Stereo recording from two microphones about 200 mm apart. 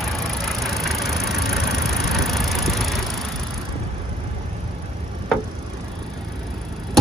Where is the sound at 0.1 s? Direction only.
Centre (ahead or behind).